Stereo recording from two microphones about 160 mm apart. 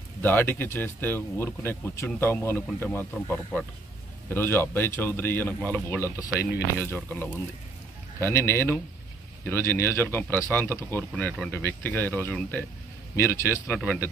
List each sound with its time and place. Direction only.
0.2 s speech: 10° left (ahead or behind)
5.9 s speech: 15° right (ahead or behind)
6.8 s speech: 10° left (ahead or behind)